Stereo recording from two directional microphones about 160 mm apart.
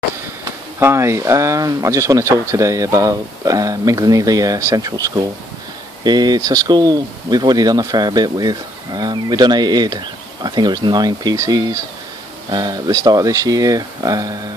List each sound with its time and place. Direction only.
0.7 s speech: 15° right (ahead or behind)